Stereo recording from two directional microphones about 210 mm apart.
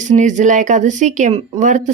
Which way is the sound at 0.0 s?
35° right (ahead or behind).